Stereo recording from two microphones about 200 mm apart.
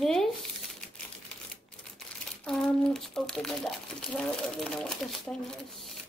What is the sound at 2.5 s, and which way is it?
Speech, centre (ahead or behind).